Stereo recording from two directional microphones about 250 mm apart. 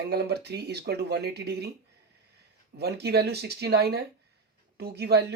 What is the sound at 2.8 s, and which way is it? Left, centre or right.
Speech, right.